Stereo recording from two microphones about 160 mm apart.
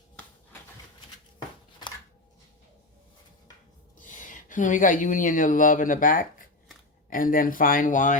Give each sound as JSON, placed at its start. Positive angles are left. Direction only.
{"t": 4.1, "sound": "speech", "side_deg": 55}